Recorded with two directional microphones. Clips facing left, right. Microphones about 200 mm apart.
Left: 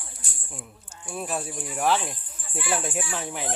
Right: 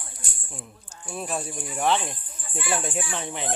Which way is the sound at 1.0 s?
5° left (ahead or behind).